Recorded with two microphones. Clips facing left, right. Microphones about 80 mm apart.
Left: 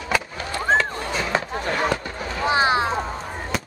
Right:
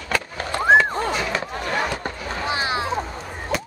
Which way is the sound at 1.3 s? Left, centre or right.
Left.